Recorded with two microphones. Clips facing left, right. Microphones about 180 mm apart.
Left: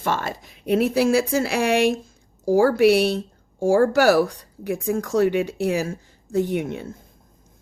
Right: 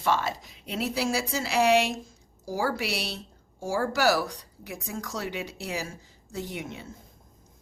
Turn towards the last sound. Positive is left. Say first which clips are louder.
# left 12 dB
turn(degrees=55)  # may be behind; listen again after turning